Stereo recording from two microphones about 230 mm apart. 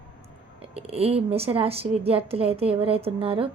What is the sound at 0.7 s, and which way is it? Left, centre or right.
A woman's voice, right.